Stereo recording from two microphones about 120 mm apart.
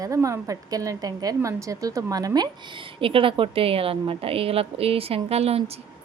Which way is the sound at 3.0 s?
50° right (ahead or behind).